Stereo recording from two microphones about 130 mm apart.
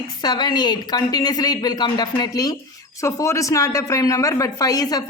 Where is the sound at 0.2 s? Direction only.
35° left (ahead or behind).